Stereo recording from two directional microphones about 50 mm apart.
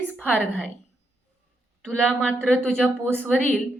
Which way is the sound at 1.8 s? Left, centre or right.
Centre.